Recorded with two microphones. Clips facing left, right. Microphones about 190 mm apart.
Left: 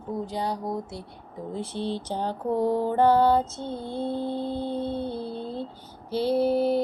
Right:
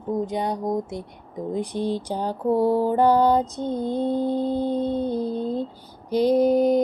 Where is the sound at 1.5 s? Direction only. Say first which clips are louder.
Right 5 dB; 15° right (ahead or behind).